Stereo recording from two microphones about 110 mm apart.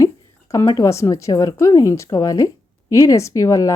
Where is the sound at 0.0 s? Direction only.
30° left (ahead or behind).